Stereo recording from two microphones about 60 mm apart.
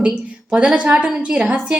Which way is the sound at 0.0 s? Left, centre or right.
Centre.